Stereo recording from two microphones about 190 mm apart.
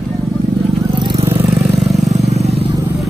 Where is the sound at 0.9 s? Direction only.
20° right (ahead or behind).